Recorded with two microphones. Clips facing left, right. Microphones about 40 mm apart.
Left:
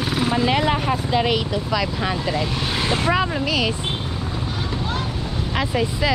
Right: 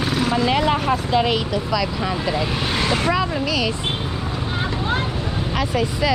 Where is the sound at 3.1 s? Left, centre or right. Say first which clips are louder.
Even; left.